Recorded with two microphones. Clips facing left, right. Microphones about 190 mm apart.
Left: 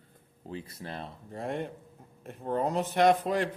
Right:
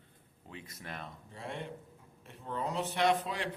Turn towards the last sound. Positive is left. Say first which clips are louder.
# left 7 dB
turn(degrees=45)  # may be behind; listen again after turning